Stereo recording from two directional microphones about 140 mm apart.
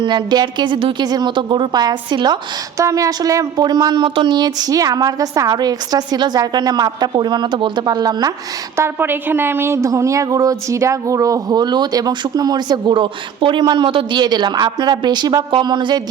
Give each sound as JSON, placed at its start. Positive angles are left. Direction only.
{"t": 0.0, "sound": "a woman's voice", "side_deg": -30}
{"t": 8.8, "sound": "a woman's voice", "side_deg": -15}